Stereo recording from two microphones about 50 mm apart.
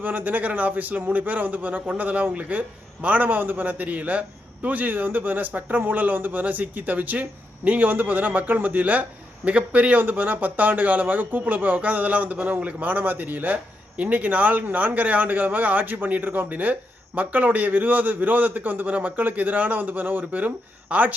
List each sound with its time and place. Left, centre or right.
0.0 s a man's voice: right
10.0 s a man's voice: right